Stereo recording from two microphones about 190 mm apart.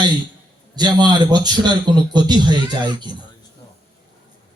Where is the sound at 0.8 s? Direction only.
20° right (ahead or behind).